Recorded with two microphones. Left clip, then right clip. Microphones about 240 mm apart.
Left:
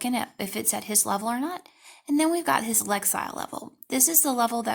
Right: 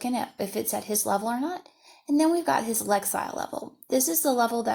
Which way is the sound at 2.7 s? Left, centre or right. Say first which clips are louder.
Right 2 dB; left.